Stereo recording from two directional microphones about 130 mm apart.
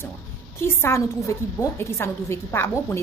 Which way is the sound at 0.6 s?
20° left (ahead or behind).